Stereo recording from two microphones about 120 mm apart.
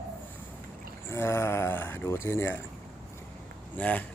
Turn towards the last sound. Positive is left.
turn(degrees=10)  # may be behind; listen again after turning